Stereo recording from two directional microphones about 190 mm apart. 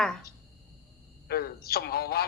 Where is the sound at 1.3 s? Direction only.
55° left (ahead or behind).